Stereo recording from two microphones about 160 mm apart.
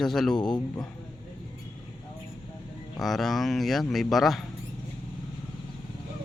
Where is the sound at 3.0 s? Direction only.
Centre (ahead or behind).